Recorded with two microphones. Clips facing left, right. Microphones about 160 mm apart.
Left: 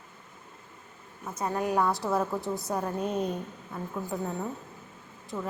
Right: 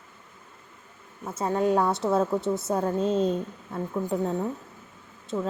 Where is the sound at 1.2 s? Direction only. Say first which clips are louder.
Right 5 dB; 25° right (ahead or behind).